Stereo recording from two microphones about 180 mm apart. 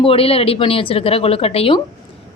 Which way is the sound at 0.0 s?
30° left (ahead or behind).